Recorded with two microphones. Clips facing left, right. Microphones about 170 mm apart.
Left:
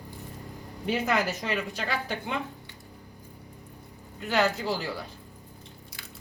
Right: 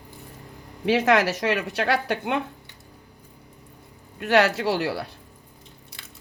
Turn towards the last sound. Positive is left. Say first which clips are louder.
# right 6 dB
turn(degrees=-70)  # may be behind; listen again after turning